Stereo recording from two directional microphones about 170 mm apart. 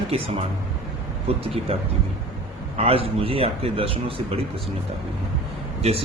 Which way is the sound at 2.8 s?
35° right (ahead or behind).